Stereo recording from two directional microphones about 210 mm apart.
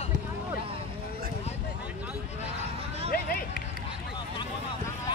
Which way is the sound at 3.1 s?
45° left (ahead or behind).